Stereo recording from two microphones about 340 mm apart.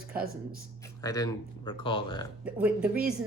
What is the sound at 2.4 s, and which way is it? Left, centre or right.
Speech, centre.